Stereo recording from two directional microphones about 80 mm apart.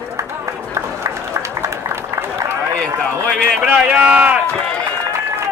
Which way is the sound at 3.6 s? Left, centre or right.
Centre.